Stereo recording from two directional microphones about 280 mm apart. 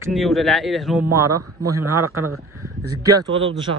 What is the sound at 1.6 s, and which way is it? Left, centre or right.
Speech, centre.